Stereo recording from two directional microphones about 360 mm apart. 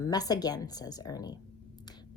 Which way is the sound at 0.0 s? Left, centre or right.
Centre.